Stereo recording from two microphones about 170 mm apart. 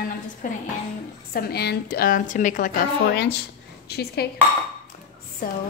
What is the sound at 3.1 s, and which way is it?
A woman's voice, 75° left (ahead or behind).